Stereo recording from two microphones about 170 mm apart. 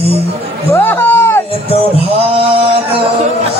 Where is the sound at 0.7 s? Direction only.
10° left (ahead or behind).